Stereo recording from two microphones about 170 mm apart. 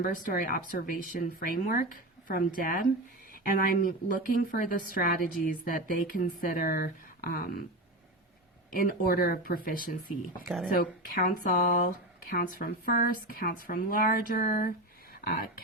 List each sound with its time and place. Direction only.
0.3 s speech: 55° left (ahead or behind)
8.7 s speech: 60° left (ahead or behind)
10.2 s speech: centre (ahead or behind)
10.8 s speech: 55° left (ahead or behind)